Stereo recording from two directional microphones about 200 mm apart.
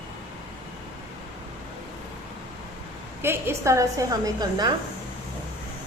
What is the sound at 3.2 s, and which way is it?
A woman's voice, 10° right (ahead or behind).